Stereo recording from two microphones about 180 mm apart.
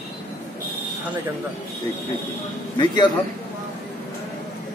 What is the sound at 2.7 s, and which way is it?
Speech, 25° left (ahead or behind).